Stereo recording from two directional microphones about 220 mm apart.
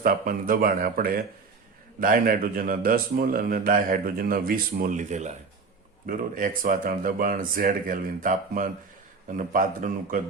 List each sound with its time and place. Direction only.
0.0 s speech: 40° right (ahead or behind)